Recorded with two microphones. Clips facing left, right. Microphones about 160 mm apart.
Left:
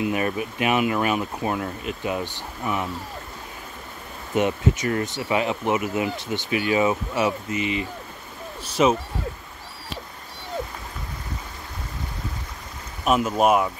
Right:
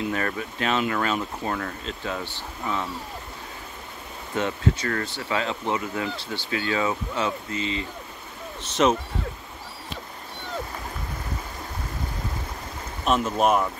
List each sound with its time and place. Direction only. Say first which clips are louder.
0.0 s speech: left 3 dB; 15° left (ahead or behind)
4.4 s speech: left 3 dB; 20° left (ahead or behind)
8.8 s speech: left 1 dB; 5° left (ahead or behind)
13.0 s speech: left 2 dB; 5° left (ahead or behind)